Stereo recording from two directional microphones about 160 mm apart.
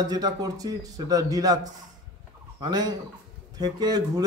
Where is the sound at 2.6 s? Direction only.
25° right (ahead or behind).